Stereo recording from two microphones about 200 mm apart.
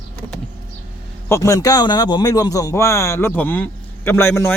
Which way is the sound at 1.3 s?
15° left (ahead or behind).